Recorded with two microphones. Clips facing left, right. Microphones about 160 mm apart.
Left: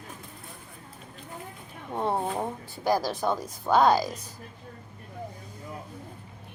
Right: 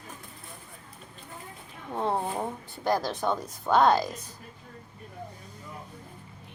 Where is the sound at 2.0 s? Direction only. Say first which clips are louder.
Left 1 dB; 5° left (ahead or behind).